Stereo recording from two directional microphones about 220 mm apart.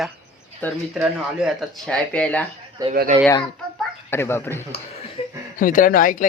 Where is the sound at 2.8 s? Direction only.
15° right (ahead or behind).